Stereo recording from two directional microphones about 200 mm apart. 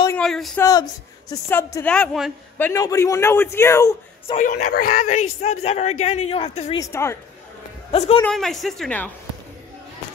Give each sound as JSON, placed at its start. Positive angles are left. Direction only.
{"t": 0.1, "sound": "a sound", "side_deg": 0}
{"t": 0.6, "sound": "speech", "side_deg": 20}
{"t": 2.6, "sound": "speech", "side_deg": 15}
{"t": 4.3, "sound": "speech", "side_deg": 40}
{"t": 6.8, "sound": "speech", "side_deg": 15}
{"t": 7.9, "sound": "speech", "side_deg": 30}
{"t": 8.2, "sound": "speech", "side_deg": 5}